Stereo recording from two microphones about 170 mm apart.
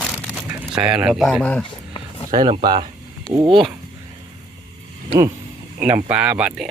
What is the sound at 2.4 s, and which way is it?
Speech, 25° right (ahead or behind).